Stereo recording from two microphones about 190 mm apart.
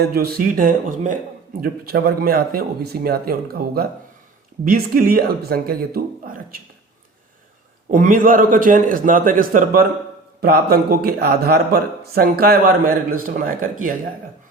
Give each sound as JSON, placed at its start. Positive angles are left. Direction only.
{"t": 0.0, "sound": "speech", "side_deg": -55}
{"t": 1.6, "sound": "speech", "side_deg": -55}
{"t": 7.9, "sound": "speech", "side_deg": -45}